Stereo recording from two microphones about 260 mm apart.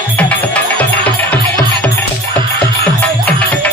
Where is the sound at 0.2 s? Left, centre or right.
Centre.